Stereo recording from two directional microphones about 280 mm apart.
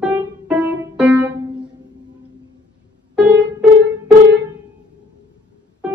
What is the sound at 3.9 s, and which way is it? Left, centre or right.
Music, right.